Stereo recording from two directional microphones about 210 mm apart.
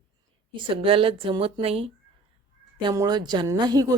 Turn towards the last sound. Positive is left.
turn(degrees=-20)  # may be behind; listen again after turning